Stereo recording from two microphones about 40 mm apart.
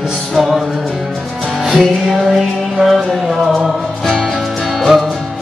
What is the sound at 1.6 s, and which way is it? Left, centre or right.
Music, centre.